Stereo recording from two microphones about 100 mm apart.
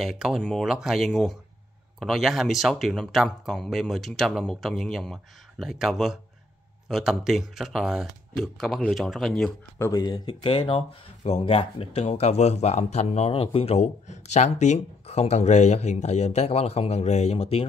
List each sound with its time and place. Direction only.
0.0 s speech: centre (ahead or behind)
9.9 s speech: 45° left (ahead or behind)
10.4 s speech: 60° left (ahead or behind)
11.2 s speech: 80° left
13.2 s a man's voice: 75° left (ahead or behind)